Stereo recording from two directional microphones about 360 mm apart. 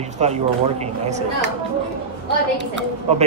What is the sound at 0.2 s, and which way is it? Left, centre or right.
Speech, centre.